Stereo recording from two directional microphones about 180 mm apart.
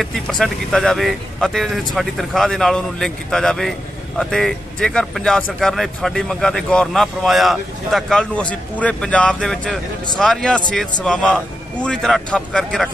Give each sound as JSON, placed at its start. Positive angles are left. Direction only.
{"t": 0.0, "sound": "speech", "side_deg": 0}